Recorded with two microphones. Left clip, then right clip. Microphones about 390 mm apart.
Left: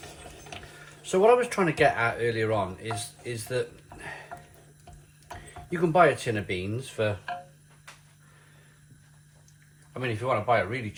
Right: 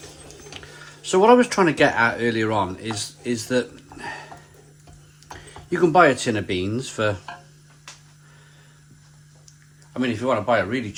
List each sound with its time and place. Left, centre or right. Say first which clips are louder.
0.6 s a sound: right 5 dB; right
1.0 s speech: right 6 dB; right
5.5 s speech: right 8 dB; right
10.0 s speech: right 5 dB; right